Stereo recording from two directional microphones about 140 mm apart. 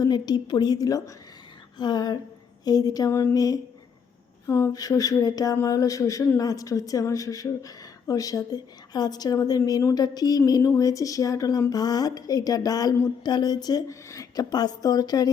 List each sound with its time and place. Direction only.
0.0 s speech: 30° left (ahead or behind)